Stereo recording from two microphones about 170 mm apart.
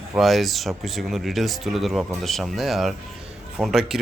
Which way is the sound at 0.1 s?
Centre (ahead or behind).